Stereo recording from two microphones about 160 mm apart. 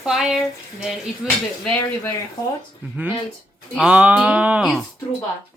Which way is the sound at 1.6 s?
10° left (ahead or behind).